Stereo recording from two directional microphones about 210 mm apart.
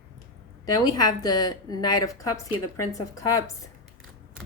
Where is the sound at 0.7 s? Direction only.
20° left (ahead or behind).